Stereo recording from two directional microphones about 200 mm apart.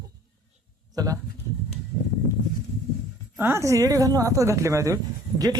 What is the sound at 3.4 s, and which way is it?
A woman's voice, 10° right (ahead or behind).